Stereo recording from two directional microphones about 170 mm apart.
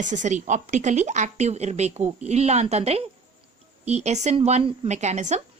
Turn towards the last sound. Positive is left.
turn(degrees=-40)  # may be behind; listen again after turning